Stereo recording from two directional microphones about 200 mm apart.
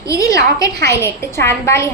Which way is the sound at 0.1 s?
15° left (ahead or behind).